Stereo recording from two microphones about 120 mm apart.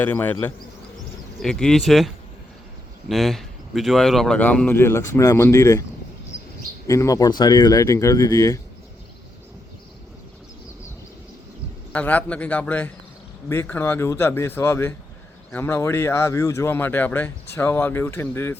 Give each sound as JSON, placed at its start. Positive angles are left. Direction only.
{"t": 0.0, "sound": "speech", "side_deg": 15}
{"t": 1.4, "sound": "speech", "side_deg": 5}
{"t": 6.8, "sound": "speech", "side_deg": 25}
{"t": 11.9, "sound": "speech", "side_deg": 10}